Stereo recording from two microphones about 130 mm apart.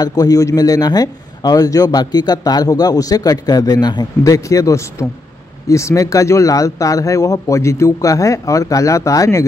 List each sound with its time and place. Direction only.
0.0 s a man's voice: 30° left (ahead or behind)